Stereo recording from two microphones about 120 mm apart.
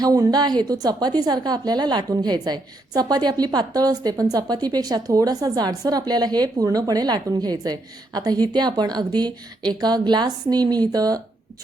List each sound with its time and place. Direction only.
0.0 s a woman's voice: 30° right (ahead or behind)